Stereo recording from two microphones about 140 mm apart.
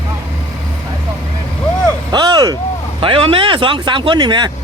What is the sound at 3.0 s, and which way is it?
Speech, 40° right (ahead or behind).